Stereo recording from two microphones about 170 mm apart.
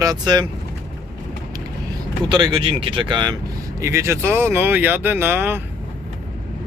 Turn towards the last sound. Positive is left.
turn(degrees=-15)  # may be behind; listen again after turning